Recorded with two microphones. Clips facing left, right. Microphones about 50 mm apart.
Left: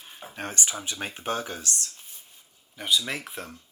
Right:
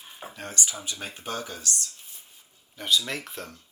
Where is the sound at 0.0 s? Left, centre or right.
Centre.